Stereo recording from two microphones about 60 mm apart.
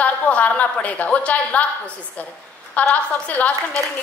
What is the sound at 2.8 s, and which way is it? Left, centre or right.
Speech, left.